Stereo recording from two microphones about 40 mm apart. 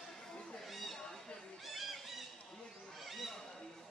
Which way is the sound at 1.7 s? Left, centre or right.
Centre.